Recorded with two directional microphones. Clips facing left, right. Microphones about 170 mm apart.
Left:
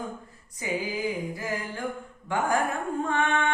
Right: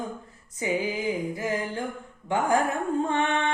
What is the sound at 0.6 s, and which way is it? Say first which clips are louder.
Music: right 3 dB; 20° right (ahead or behind).